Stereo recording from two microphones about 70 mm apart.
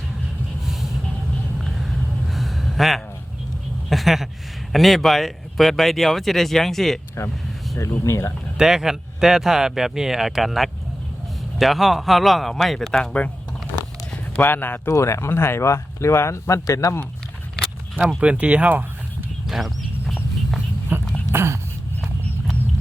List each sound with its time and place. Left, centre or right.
2.3 s a sound: centre
4.7 s speech: centre
7.8 s speech: left
8.5 s speech: centre
14.3 s speech: left
14.9 s speech: left
15.3 s speech: left
18.2 s speech: centre
19.5 s a sound: centre
20.9 s a sound: right